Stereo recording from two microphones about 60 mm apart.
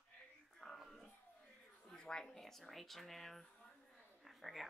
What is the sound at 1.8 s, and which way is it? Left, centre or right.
Speech, centre.